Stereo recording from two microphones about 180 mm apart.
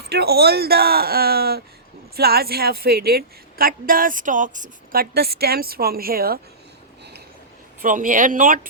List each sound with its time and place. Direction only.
0.1 s a woman's voice: 60° right (ahead or behind)
7.8 s speech: 50° right (ahead or behind)